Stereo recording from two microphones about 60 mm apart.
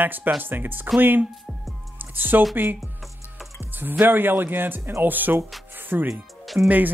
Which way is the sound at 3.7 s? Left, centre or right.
Right.